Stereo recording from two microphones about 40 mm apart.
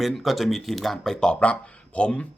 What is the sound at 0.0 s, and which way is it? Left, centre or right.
Speech, centre.